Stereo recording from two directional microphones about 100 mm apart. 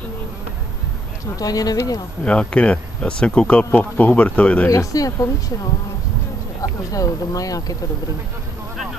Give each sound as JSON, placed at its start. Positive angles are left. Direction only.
{"t": 1.3, "sound": "speech", "side_deg": 40}
{"t": 2.2, "sound": "speech", "side_deg": 10}
{"t": 4.6, "sound": "speech", "side_deg": 35}
{"t": 6.9, "sound": "speech", "side_deg": 35}